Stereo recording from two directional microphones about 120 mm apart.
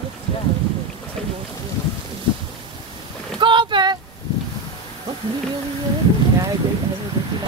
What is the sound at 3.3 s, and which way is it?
Boat, 40° right (ahead or behind).